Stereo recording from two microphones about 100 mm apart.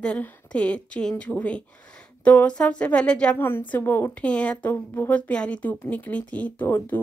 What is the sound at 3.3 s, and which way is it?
A woman's voice, 20° left (ahead or behind).